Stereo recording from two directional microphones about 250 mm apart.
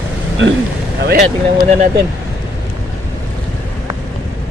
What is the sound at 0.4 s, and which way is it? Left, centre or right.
Speech, right.